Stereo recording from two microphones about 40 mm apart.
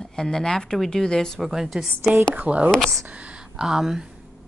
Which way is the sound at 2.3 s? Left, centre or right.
Right.